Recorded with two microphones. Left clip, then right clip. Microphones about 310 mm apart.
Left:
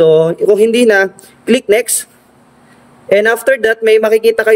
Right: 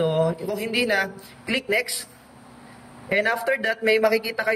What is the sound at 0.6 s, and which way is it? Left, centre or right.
Speech, centre.